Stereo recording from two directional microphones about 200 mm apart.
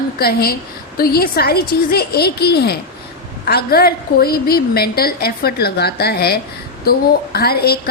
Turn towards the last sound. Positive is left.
turn(degrees=50)  # may be behind; listen again after turning